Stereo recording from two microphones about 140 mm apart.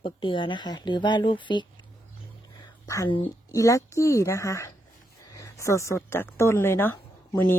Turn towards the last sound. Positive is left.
turn(degrees=20)  # may be behind; listen again after turning